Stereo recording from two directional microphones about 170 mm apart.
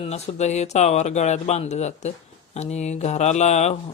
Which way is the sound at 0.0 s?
40° left (ahead or behind).